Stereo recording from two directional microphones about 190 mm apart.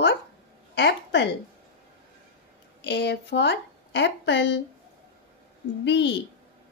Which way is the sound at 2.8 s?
65° left (ahead or behind).